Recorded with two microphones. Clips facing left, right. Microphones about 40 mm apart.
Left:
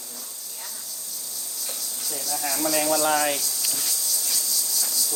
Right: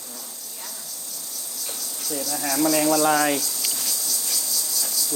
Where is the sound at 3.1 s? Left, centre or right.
Centre.